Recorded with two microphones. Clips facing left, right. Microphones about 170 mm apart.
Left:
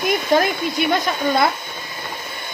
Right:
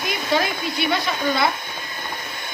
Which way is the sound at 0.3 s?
50° left (ahead or behind).